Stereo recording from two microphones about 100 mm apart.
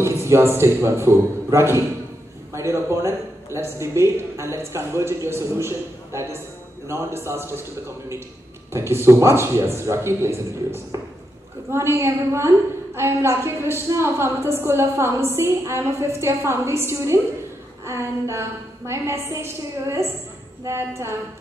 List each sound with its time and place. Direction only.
0.0 s a man's voice: 30° right (ahead or behind)
8.7 s a woman's voice: 25° right (ahead or behind)